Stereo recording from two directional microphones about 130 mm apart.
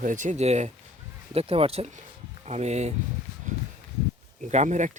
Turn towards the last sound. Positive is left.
turn(degrees=-70)  # may be behind; listen again after turning